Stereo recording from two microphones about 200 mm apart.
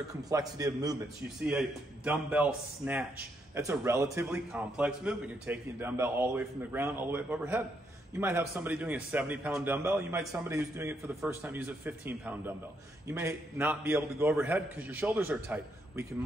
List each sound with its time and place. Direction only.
0.1 s a man's voice: 15° right (ahead or behind)
1.4 s a man's voice: 5° right (ahead or behind)